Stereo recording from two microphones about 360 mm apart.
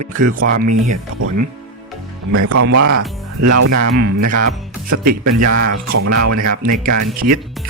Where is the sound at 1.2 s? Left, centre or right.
Right.